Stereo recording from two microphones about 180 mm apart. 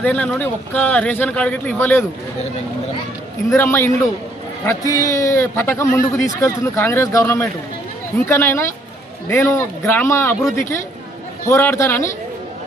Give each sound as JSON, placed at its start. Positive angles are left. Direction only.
{"t": 0.0, "sound": "a man's voice", "side_deg": 10}
{"t": 3.5, "sound": "a man's voice", "side_deg": 15}
{"t": 11.4, "sound": "a man's voice", "side_deg": 15}